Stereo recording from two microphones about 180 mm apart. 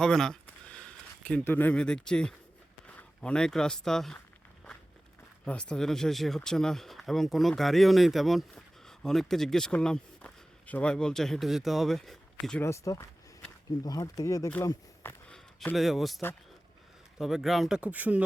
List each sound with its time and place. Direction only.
0.0 s speech: 5° left (ahead or behind)
5.5 s speech: 5° left (ahead or behind)
12.6 s speech: 15° left (ahead or behind)
15.3 s a man's voice: centre (ahead or behind)